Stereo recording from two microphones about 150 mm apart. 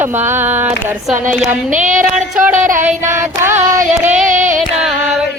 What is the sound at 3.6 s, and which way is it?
Speech, 50° right (ahead or behind).